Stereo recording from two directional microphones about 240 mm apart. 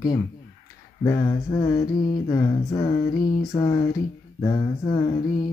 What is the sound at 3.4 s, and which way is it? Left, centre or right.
Speech, left.